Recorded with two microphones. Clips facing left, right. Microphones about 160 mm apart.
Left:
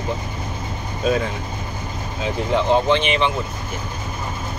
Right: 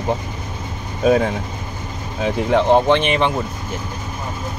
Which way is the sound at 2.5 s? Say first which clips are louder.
Right 3 dB; 55° right (ahead or behind).